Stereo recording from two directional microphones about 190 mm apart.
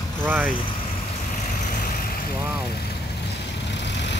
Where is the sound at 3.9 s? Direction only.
65° left (ahead or behind).